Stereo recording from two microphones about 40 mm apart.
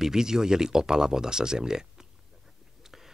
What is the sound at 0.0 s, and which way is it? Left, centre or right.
Speech, centre.